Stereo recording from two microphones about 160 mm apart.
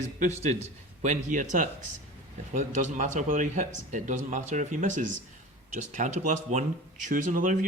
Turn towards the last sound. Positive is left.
turn(degrees=-55)  # may be behind; listen again after turning